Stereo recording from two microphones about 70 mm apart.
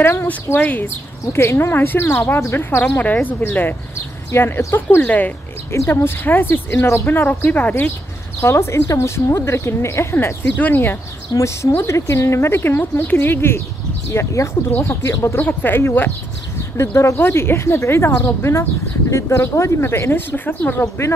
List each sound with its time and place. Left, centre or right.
0.0 s speech: left
0.6 s speech: left
1.2 s speech: left
4.9 s speech: left
5.7 s speech: left
8.4 s speech: left
11.3 s speech: left